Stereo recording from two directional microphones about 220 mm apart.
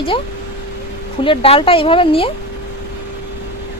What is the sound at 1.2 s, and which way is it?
Speech, 25° left (ahead or behind).